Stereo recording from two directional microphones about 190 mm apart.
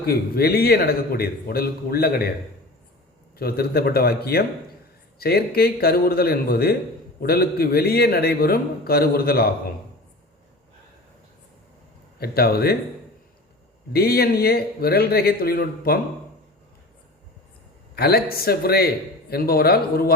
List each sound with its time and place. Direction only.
0.0 s a man's voice: 55° left (ahead or behind)
3.3 s a man's voice: 55° left (ahead or behind)
12.2 s a man's voice: 55° left (ahead or behind)
13.9 s a man's voice: 55° left (ahead or behind)
17.9 s a man's voice: 55° left (ahead or behind)